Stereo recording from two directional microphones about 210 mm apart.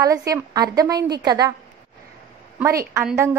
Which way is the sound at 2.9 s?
10° right (ahead or behind).